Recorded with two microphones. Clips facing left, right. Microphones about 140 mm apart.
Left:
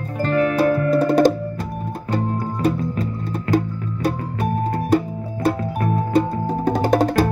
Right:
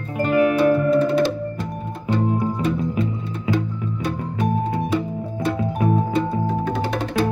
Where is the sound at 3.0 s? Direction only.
40° left (ahead or behind).